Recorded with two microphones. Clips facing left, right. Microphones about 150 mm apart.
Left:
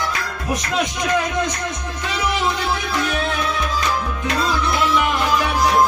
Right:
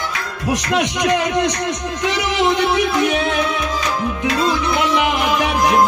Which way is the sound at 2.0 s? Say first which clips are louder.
Right 4 dB; 90° right.